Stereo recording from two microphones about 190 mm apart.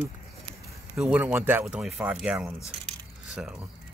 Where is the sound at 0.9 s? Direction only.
5° right (ahead or behind).